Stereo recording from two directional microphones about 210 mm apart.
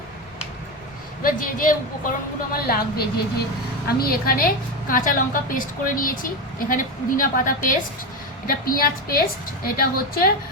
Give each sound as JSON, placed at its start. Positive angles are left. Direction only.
{"t": 1.2, "sound": "a woman's voice", "side_deg": 40}